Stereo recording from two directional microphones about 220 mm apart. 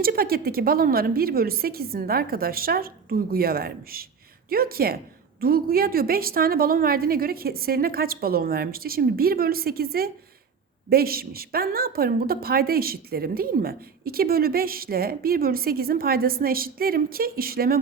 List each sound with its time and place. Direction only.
0.0 s a woman's voice: 40° right (ahead or behind)